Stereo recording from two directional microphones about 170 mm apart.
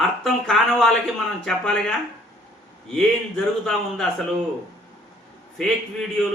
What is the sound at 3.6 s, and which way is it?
Speech, 5° left (ahead or behind).